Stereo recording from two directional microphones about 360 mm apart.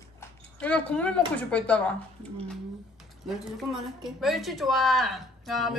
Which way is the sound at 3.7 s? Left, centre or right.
Centre.